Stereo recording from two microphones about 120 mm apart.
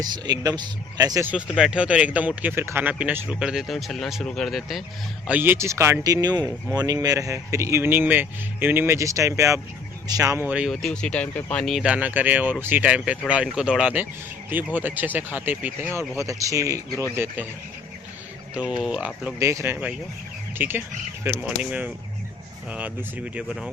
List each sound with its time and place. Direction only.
0.0 s speech: 35° right (ahead or behind)
1.2 s speech: 10° right (ahead or behind)
5.3 s speech: 15° right (ahead or behind)
10.4 s speech: 10° right (ahead or behind)
10.7 s speech: 5° left (ahead or behind)
11.6 s speech: 5° right (ahead or behind); by 16.8 s 25° right (ahead or behind)
18.7 s speech: 5° right (ahead or behind)
19.4 s speech: 25° right (ahead or behind)